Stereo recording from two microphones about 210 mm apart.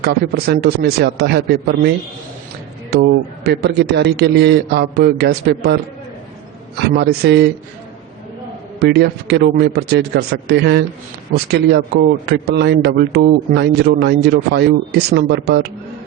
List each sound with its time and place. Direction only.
0.0 s a man's voice: 50° right (ahead or behind)
2.9 s a man's voice: 50° right (ahead or behind)
8.8 s a man's voice: 50° right (ahead or behind)
12.2 s a man's voice: 50° right (ahead or behind)